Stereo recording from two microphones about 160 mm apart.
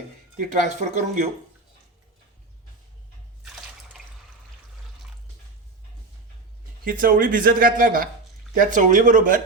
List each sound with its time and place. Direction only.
0.5 s speech: 50° right (ahead or behind)
6.8 s speech: 60° right (ahead or behind)